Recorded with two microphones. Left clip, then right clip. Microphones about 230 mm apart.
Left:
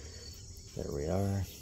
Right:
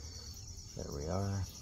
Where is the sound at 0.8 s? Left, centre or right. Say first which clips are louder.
Left 5 dB; left.